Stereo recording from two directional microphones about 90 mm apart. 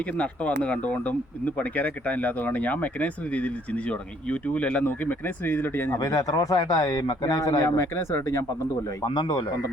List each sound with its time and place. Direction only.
0.2 s speech: 15° left (ahead or behind)
6.0 s speech: 45° left (ahead or behind)
7.6 s speech: 30° left (ahead or behind)
9.0 s speech: 55° left (ahead or behind)